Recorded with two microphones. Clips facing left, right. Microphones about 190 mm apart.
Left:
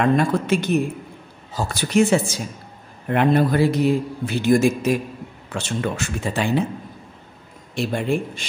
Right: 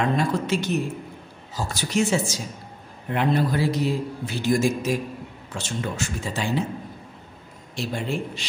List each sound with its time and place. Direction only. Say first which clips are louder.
0.0 s a man's voice: left 5 dB; 55° left (ahead or behind)
7.7 s a man's voice: left 6 dB; 55° left (ahead or behind)